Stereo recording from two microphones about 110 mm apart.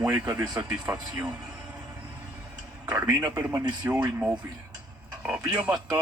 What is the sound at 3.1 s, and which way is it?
Speech, 40° right (ahead or behind).